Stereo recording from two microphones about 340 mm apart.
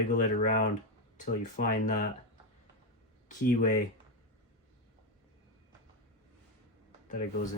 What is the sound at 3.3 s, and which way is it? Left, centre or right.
Speech, left.